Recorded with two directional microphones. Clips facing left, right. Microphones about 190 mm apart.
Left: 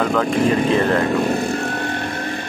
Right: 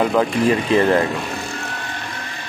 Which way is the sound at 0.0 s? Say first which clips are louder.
Right 2 dB; 5° right (ahead or behind).